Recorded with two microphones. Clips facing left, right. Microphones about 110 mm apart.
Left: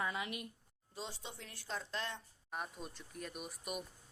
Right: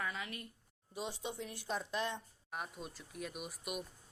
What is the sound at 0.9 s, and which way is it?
Speech, 15° right (ahead or behind).